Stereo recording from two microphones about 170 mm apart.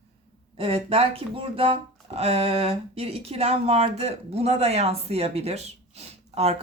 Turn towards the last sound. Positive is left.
turn(degrees=-35)  # may be behind; listen again after turning